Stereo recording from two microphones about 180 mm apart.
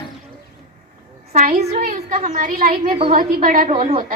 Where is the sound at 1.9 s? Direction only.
45° right (ahead or behind).